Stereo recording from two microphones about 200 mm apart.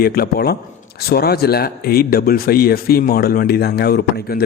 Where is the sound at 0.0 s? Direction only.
50° left (ahead or behind).